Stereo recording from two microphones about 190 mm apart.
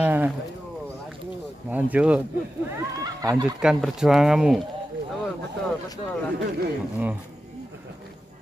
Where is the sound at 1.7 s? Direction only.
5° right (ahead or behind).